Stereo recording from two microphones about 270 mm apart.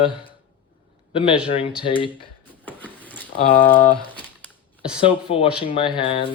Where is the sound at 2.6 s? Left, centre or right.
Centre.